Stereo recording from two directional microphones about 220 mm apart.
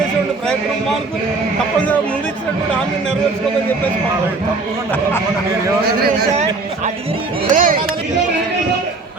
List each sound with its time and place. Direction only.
6.0 s a man's voice: 35° right (ahead or behind)